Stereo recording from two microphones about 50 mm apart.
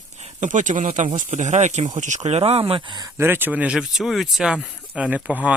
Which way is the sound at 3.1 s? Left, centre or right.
Right.